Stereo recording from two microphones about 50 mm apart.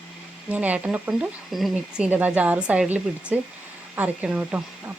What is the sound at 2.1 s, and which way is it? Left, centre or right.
Speech, right.